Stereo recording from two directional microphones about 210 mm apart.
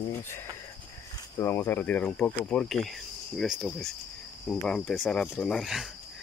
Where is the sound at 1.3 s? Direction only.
10° left (ahead or behind).